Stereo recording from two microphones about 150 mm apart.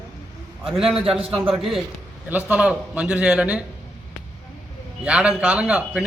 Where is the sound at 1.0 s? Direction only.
40° right (ahead or behind).